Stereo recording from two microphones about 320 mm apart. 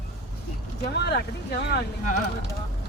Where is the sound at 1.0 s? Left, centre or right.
Left.